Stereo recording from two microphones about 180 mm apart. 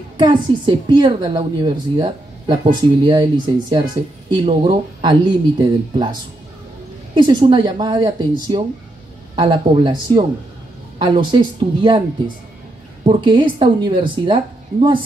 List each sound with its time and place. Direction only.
0.2 s a woman's voice: 25° right (ahead or behind)
7.2 s a woman's voice: 25° right (ahead or behind)
13.0 s a woman's voice: 30° right (ahead or behind)